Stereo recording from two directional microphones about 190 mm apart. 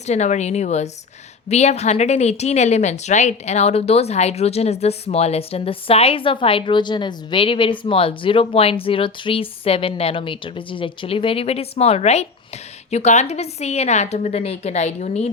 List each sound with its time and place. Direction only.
0.1 s speech: 35° left (ahead or behind)